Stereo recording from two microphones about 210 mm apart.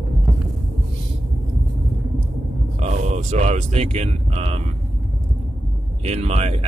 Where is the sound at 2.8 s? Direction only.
30° right (ahead or behind).